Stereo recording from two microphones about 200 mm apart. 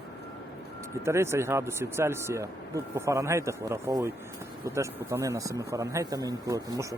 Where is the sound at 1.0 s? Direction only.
15° right (ahead or behind).